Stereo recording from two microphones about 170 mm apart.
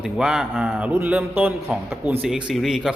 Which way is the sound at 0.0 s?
5° right (ahead or behind).